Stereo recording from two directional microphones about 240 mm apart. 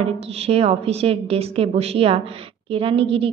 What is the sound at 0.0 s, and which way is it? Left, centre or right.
A woman's voice, right.